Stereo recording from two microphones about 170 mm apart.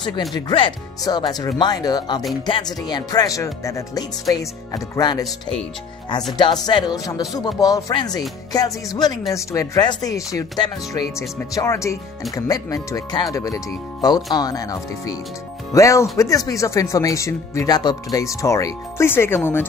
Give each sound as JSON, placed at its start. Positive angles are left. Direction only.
{"t": 0.5, "sound": "speech", "side_deg": 30}
{"t": 5.2, "sound": "speech", "side_deg": 5}
{"t": 6.3, "sound": "speech", "side_deg": 25}